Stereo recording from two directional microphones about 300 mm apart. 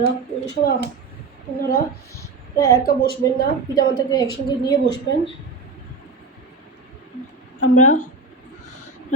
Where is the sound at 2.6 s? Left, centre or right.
Centre.